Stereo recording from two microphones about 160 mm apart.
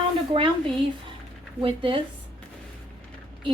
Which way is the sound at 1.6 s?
35° right (ahead or behind).